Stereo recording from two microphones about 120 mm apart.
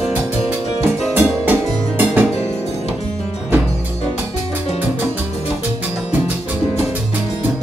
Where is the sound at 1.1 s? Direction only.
15° right (ahead or behind).